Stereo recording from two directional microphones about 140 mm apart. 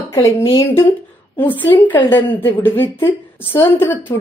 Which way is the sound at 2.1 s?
15° left (ahead or behind).